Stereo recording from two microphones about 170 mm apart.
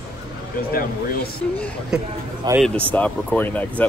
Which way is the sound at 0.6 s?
60° left (ahead or behind).